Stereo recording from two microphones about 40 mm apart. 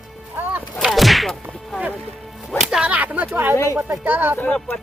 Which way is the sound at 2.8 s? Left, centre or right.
Right.